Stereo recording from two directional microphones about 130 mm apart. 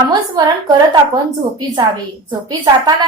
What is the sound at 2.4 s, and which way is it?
Speech, 35° right (ahead or behind).